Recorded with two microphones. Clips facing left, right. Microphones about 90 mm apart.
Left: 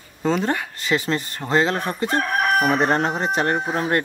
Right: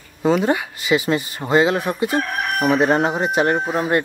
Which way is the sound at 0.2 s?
10° right (ahead or behind).